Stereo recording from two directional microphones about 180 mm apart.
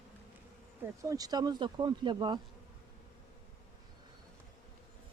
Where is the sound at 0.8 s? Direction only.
15° right (ahead or behind).